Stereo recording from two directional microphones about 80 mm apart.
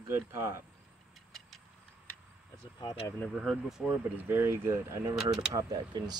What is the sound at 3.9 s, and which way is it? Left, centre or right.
Speech, right.